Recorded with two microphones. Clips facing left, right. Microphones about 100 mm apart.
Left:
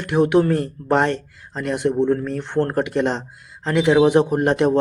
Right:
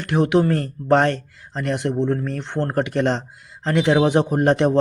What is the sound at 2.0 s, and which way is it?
Speech, 40° right (ahead or behind).